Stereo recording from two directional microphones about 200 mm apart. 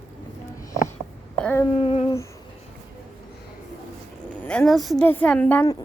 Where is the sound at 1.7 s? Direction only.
30° left (ahead or behind).